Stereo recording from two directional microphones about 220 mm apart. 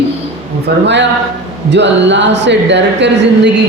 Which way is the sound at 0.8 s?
55° right (ahead or behind).